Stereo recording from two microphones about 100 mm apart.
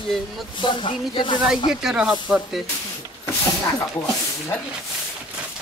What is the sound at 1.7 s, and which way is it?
Speech, 5° right (ahead or behind).